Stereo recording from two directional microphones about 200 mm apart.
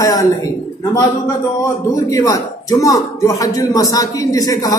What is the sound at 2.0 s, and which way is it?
Speech, 15° left (ahead or behind).